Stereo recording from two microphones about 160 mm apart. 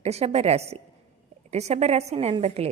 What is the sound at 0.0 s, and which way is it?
A woman's voice, 40° right (ahead or behind).